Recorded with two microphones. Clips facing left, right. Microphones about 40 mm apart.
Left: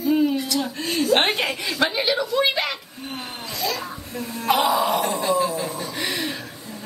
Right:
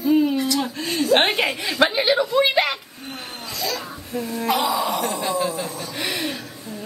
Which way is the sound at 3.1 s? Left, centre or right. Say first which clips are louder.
Left 1 dB; centre.